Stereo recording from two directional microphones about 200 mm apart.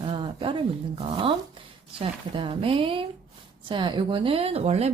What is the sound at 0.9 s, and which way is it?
A woman's voice, 25° right (ahead or behind).